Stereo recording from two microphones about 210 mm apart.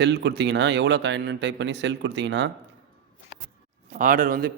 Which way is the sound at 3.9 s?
40° right (ahead or behind).